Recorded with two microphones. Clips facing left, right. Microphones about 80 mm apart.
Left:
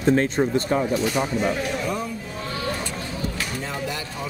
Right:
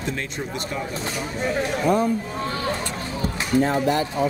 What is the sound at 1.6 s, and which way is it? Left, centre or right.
Speech, right.